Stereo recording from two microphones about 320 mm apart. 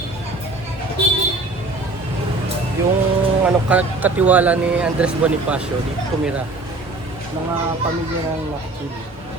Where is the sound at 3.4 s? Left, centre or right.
Centre.